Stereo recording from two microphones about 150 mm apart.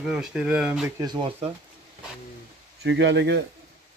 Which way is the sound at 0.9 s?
30° right (ahead or behind).